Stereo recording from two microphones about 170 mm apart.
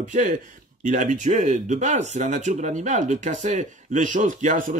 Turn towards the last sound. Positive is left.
turn(degrees=-50)  # may be behind; listen again after turning